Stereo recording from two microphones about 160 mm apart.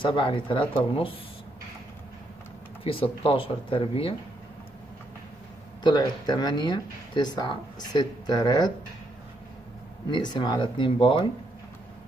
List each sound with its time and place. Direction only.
0.0 s speech: 30° left (ahead or behind)
2.8 s speech: 35° left (ahead or behind)
5.9 s speech: 25° left (ahead or behind)
10.0 s speech: 30° left (ahead or behind)